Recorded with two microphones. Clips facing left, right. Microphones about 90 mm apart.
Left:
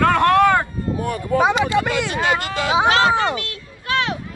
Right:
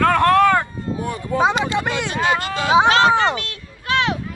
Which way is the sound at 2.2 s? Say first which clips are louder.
Right 3 dB; 25° right (ahead or behind).